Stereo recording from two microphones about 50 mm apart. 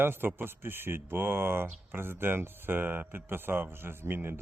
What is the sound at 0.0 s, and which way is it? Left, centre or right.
Speech, right.